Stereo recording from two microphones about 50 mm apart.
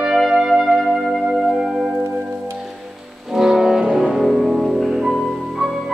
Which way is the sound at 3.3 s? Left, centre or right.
Centre.